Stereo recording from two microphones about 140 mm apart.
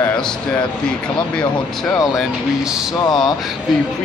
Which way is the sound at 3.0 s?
30° left (ahead or behind).